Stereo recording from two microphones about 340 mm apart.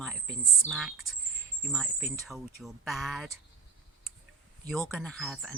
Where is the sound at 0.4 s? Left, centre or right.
Centre.